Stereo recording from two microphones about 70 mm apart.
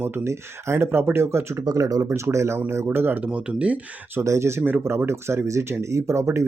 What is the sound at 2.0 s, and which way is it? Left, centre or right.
Speech, right.